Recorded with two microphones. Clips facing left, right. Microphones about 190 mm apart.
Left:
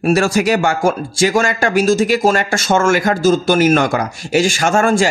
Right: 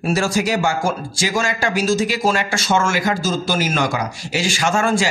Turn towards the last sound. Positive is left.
turn(degrees=50)  # may be behind; listen again after turning